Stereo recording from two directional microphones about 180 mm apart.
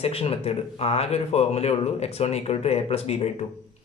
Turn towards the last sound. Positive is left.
turn(degrees=35)  # may be behind; listen again after turning